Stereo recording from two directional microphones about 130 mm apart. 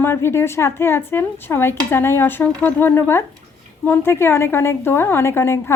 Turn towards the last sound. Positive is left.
turn(degrees=20)  # may be behind; listen again after turning